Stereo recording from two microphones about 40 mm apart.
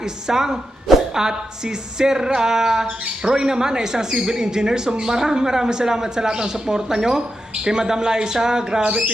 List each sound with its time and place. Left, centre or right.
0.0 s speech: centre